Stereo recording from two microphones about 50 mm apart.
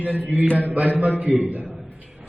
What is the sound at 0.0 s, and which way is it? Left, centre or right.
Speech, right.